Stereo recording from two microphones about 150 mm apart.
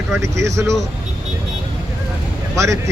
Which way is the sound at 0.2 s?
20° right (ahead or behind).